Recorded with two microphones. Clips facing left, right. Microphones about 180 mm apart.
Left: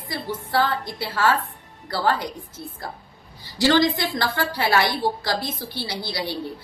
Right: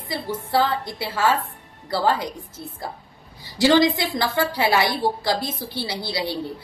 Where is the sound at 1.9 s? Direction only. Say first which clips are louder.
Right 1 dB; 25° right (ahead or behind).